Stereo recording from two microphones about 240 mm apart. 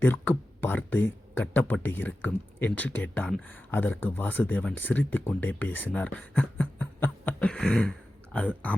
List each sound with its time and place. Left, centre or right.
0.0 s speech: centre